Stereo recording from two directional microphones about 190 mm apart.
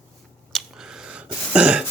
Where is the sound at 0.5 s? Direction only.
5° right (ahead or behind).